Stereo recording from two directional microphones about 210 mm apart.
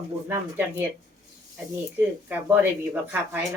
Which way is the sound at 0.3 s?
10° right (ahead or behind).